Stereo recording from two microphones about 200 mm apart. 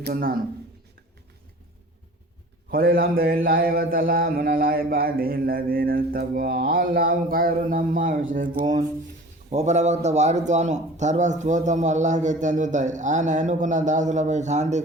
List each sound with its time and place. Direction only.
0.0 s a man's voice: 45° right (ahead or behind)
2.6 s a man's voice: 45° right (ahead or behind)